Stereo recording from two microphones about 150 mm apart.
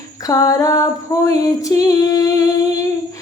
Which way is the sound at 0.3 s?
25° left (ahead or behind).